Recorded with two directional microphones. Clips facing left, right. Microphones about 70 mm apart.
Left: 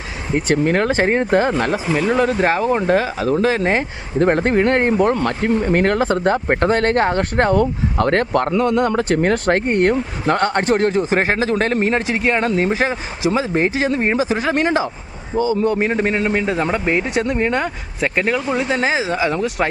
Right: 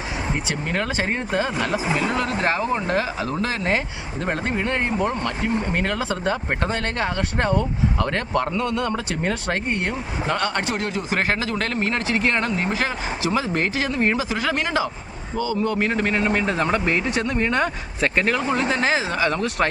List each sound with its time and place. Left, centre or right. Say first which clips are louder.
0.3 s speech: left 13 dB; left
2.0 s speech: left 6 dB; left
4.2 s speech: left 10 dB; left
8.6 s speech: left 7 dB; left
9.0 s speech: left 9 dB; left
10.4 s speech: left 8 dB; left; by 19.6 s centre